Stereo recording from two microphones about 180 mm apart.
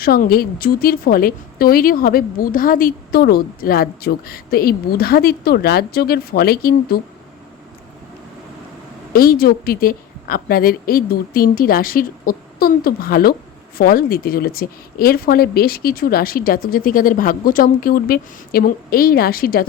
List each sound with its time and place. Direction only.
0.0 s a woman's voice: 55° left (ahead or behind)
9.1 s a woman's voice: 55° left (ahead or behind)